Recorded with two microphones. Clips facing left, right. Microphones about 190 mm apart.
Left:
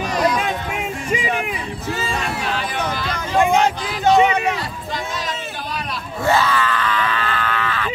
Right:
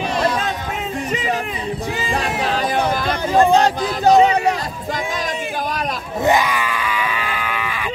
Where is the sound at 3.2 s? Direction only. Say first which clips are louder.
Right 2 dB; 35° right (ahead or behind).